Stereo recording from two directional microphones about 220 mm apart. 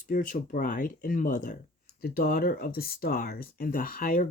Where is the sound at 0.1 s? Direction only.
40° left (ahead or behind).